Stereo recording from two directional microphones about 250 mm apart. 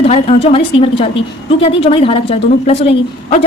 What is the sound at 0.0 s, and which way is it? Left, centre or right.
A woman's voice, left.